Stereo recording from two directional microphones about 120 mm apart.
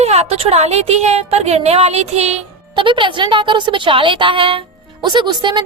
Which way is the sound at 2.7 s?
45° right (ahead or behind).